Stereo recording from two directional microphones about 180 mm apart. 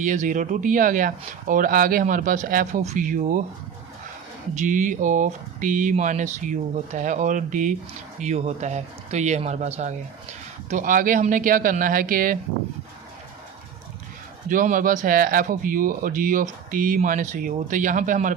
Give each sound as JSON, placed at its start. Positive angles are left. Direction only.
{"t": 0.0, "sound": "speech", "side_deg": -45}
{"t": 4.5, "sound": "speech", "side_deg": -45}
{"t": 14.5, "sound": "speech", "side_deg": -45}